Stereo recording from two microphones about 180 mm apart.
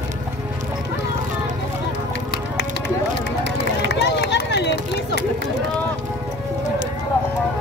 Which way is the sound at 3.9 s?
70° left (ahead or behind).